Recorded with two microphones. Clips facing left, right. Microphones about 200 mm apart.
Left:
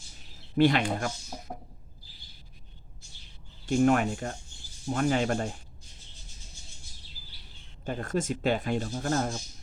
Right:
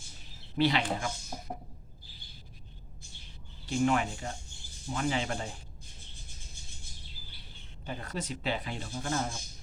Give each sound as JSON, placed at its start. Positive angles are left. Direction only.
{"t": 0.5, "sound": "speech", "side_deg": 50}
{"t": 3.7, "sound": "speech", "side_deg": 50}
{"t": 7.9, "sound": "speech", "side_deg": 50}